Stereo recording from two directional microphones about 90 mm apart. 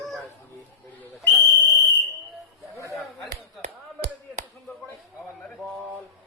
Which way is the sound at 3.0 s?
Centre (ahead or behind).